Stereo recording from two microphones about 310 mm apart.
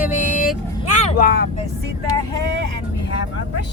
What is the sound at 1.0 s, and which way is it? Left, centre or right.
Speech, left.